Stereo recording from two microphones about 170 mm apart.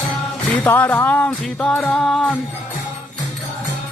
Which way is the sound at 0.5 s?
10° left (ahead or behind).